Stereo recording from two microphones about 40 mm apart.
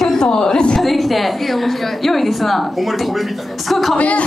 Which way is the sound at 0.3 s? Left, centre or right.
Left.